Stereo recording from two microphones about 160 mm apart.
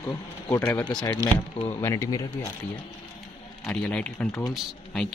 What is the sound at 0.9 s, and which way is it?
Speech, 30° left (ahead or behind).